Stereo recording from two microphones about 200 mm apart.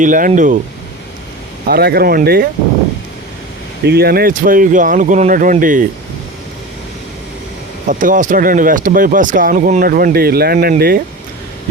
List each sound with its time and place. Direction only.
0.0 s speech: 40° right (ahead or behind)
1.6 s speech: 50° right (ahead or behind)
3.8 s speech: 50° right (ahead or behind)
7.9 s speech: 40° right (ahead or behind)